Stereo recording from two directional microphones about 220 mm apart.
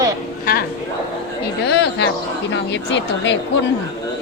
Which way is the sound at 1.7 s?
50° left (ahead or behind).